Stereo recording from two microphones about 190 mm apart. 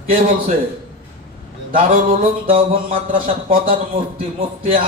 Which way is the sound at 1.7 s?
45° right (ahead or behind).